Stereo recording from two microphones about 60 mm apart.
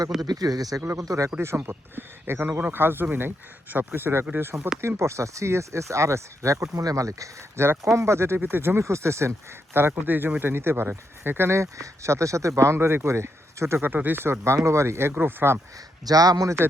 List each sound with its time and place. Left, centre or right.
0.2 s speech: right
0.9 s speech: right
2.0 s speech: right
2.5 s speech: right
2.7 s speech: right
7.6 s speech: right
8.8 s speech: right
9.7 s speech: right
13.8 s speech: right
16.0 s speech: right